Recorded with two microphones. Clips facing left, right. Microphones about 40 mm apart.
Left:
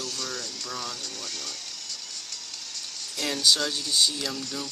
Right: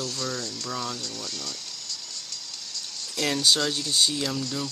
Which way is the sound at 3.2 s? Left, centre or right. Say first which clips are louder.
Right 1 dB; right.